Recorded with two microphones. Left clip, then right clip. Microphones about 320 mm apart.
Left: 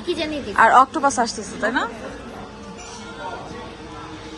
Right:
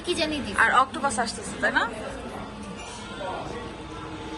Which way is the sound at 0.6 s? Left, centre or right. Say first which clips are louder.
Left 7 dB; left.